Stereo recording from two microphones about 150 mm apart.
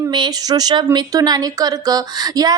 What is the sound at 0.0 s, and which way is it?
Speech, 25° right (ahead or behind).